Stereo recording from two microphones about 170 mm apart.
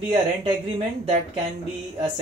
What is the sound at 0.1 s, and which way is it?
Speech, 35° right (ahead or behind).